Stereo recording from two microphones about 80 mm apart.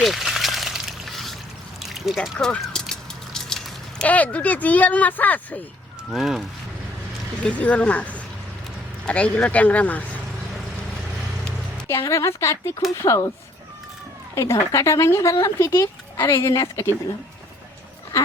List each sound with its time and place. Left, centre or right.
0.0 s a sound: centre
2.4 s speech: centre
2.9 s a sound: centre
4.0 s speech: centre
6.1 s speech: centre
7.4 s speech: centre
11.9 s speech: left
14.3 s speech: left